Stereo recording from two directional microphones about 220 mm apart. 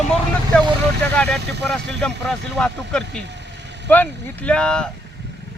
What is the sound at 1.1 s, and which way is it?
Speech, centre (ahead or behind).